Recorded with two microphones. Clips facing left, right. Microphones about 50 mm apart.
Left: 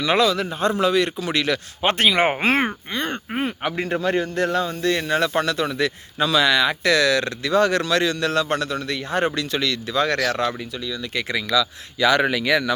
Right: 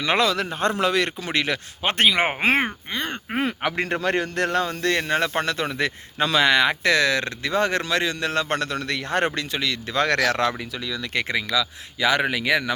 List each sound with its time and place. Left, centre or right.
0.0 s a man's voice: right
0.3 s a man's voice: right
1.3 s a man's voice: right
2.2 s speech: centre
3.3 s a man's voice: right
5.1 s a man's voice: right
8.4 s a man's voice: right
9.5 s speech: centre
9.9 s speech: right
11.5 s speech: centre